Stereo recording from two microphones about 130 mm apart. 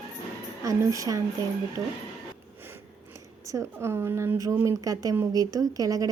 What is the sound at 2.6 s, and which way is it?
A woman's voice, 15° right (ahead or behind).